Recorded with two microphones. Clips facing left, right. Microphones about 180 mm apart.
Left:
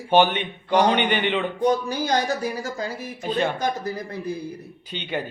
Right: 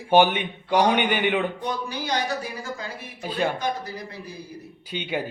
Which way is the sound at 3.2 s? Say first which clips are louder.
Left 2 dB; 5° right (ahead or behind).